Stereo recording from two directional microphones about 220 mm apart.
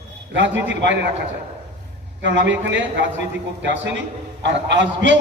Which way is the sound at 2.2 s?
55° right (ahead or behind).